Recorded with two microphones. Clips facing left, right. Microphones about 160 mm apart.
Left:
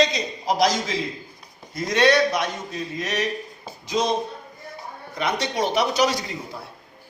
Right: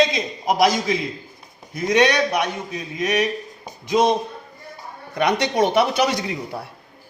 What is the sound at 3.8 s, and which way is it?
Speech, 55° right (ahead or behind).